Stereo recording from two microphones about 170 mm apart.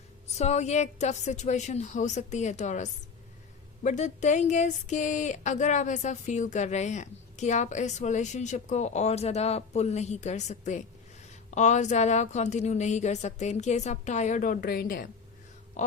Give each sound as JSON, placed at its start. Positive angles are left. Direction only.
{"t": 0.3, "sound": "speech", "side_deg": 40}